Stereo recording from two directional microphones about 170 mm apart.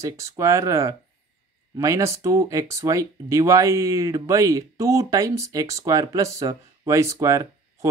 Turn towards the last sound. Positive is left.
turn(degrees=-20)  # may be behind; listen again after turning